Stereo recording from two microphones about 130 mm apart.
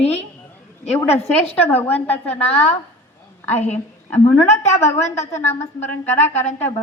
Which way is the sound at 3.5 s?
60° left (ahead or behind).